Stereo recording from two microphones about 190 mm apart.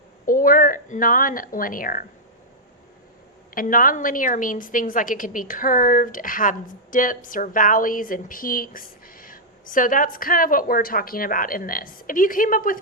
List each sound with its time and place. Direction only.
0.3 s speech: 45° left (ahead or behind)
3.5 s a woman's voice: 45° left (ahead or behind)